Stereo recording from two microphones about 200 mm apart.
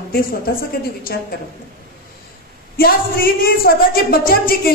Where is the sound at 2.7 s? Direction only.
50° left (ahead or behind).